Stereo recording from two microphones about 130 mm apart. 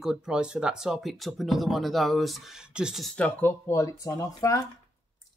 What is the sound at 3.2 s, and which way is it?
Speech, 15° left (ahead or behind).